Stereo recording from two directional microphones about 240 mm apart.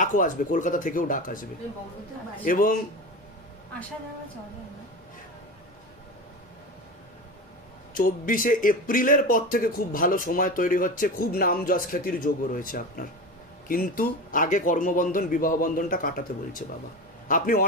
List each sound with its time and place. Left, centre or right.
0.0 s speech: left
2.4 s speech: left
7.9 s speech: left